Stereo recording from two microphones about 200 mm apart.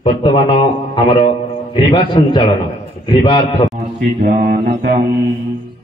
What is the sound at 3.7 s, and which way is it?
Speech, 50° right (ahead or behind).